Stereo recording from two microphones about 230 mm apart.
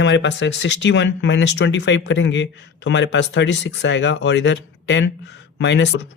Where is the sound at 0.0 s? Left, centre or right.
Left.